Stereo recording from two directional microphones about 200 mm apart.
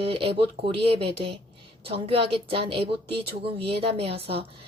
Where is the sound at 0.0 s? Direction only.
25° right (ahead or behind).